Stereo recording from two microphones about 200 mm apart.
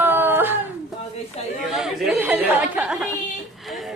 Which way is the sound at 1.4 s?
30° left (ahead or behind).